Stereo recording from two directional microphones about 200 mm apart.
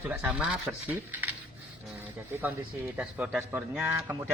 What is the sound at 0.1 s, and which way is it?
Speech, 5° right (ahead or behind).